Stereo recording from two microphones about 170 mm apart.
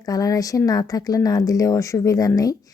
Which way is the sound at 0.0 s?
20° left (ahead or behind).